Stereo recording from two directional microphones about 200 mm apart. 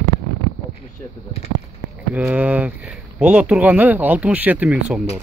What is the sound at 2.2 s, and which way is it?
Speech, 5° right (ahead or behind).